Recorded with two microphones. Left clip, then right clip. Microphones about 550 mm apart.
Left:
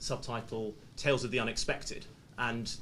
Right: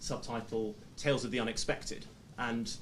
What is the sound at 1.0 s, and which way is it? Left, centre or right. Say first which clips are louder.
Speech: left 2 dB; left.